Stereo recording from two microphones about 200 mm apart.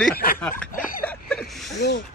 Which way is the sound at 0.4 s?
10° left (ahead or behind).